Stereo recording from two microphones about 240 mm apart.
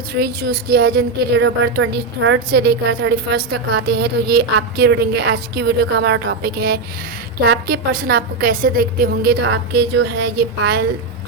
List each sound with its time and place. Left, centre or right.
0.1 s a woman's voice: right